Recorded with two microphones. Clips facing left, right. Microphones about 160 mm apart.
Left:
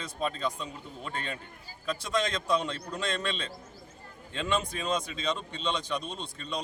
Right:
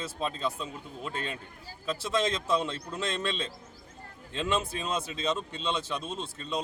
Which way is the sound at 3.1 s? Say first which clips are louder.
Right 1 dB; 25° right (ahead or behind).